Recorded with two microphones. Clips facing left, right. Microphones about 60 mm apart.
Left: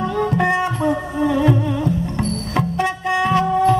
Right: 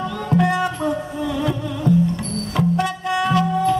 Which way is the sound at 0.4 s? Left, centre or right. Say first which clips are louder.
Right 2 dB; left.